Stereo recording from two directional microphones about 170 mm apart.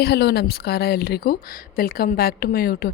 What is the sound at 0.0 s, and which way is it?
A woman's voice, 70° left (ahead or behind).